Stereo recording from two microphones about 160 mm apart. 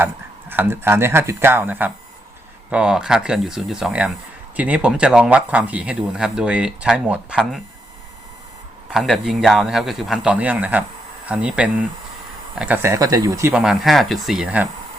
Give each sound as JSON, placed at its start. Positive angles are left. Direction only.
{"t": 0.0, "sound": "a man's voice", "side_deg": -15}
{"t": 8.9, "sound": "a man's voice", "side_deg": 0}
{"t": 13.5, "sound": "a man's voice", "side_deg": -5}